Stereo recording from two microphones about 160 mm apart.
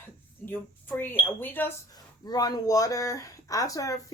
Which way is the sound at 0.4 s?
15° left (ahead or behind).